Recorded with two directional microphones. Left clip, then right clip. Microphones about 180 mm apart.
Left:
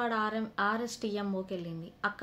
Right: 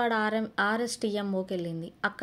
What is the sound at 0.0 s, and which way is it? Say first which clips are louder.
A woman's voice: right 4 dB; 35° right (ahead or behind).